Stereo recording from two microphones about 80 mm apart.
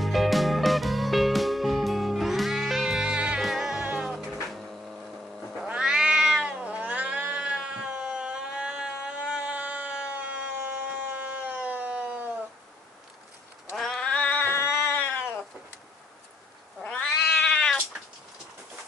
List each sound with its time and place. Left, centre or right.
0.0 s music: centre
4.2 s music: centre
5.5 s cat: centre
13.7 s cat: centre; by 15.4 s left
16.8 s cat: centre